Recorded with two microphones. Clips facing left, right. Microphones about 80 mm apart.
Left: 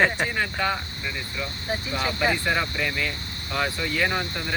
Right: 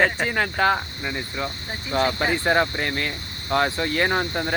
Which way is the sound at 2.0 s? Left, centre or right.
Right.